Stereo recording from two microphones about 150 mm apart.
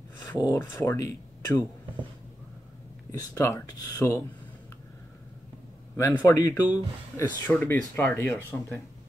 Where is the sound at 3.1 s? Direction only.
25° left (ahead or behind).